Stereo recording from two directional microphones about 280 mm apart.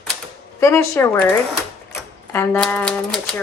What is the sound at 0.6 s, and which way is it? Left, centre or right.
A woman's voice, centre.